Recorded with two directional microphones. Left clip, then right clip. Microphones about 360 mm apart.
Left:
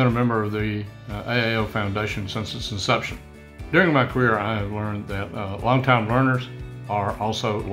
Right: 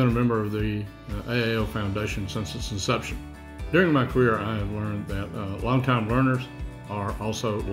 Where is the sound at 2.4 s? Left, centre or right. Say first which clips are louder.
Left 4 dB; left.